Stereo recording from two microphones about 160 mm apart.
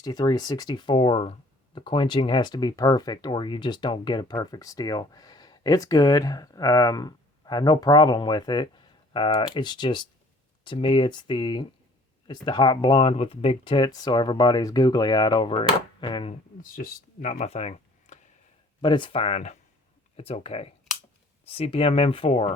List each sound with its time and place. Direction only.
0.0 s speech: 25° left (ahead or behind)
16.7 s speech: 60° left (ahead or behind)
18.8 s speech: 30° left (ahead or behind)